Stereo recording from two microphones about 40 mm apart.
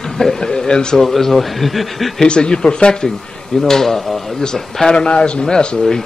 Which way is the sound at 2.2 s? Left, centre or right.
Left.